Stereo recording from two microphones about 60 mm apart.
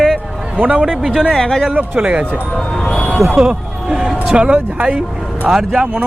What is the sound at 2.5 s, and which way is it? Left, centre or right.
Speech, centre.